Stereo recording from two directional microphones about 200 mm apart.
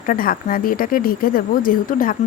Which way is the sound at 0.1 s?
45° left (ahead or behind).